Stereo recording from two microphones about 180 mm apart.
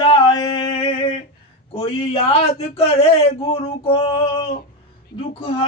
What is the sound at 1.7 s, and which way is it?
A man's voice, 35° left (ahead or behind).